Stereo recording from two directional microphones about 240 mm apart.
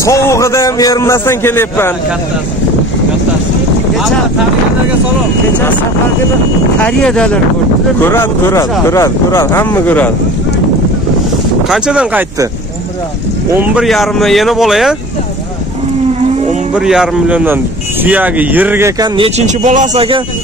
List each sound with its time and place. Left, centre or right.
0.0 s speech: centre
6.8 s speech: centre
11.7 s speech: centre
13.6 s speech: centre
16.7 s speech: centre; by 20.2 s right